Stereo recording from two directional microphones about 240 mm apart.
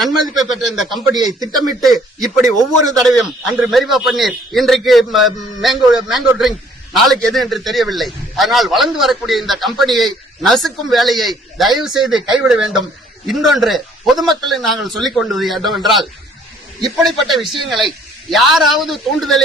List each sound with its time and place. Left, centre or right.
0.5 s a man's voice: centre
1.1 s a man's voice: centre
1.5 s a man's voice: centre
2.4 s a man's voice: centre
2.9 s a man's voice: centre